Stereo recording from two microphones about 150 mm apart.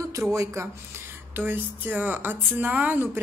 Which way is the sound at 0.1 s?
20° right (ahead or behind).